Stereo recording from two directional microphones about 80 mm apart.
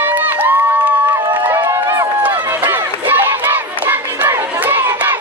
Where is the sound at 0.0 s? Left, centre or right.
Right.